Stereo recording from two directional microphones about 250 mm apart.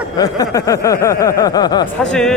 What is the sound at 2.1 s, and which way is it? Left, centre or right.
Speech, centre.